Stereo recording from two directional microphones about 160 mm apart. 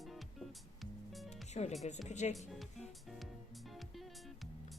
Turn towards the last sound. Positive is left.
turn(degrees=0)  # may be behind; listen again after turning